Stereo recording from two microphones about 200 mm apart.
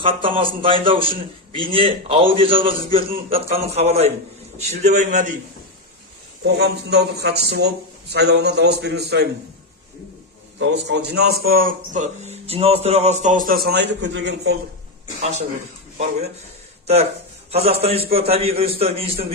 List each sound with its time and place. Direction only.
0.0 s a man's voice: 25° right (ahead or behind)
6.4 s a man's voice: 55° right (ahead or behind)
10.6 s a man's voice: 60° right (ahead or behind)
15.2 s a man's voice: 35° right (ahead or behind)
16.8 s a man's voice: 30° right (ahead or behind)